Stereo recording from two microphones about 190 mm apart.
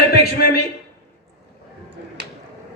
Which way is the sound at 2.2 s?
60° right (ahead or behind).